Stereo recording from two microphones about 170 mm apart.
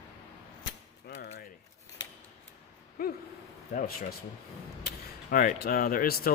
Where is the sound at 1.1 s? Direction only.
90° left.